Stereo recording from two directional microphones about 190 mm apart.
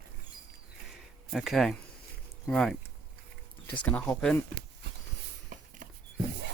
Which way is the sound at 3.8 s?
10° left (ahead or behind).